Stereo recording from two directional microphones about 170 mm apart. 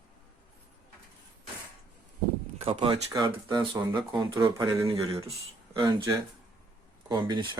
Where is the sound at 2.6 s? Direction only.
35° right (ahead or behind).